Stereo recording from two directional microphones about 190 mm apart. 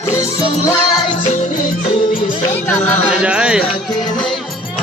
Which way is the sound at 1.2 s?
40° left (ahead or behind).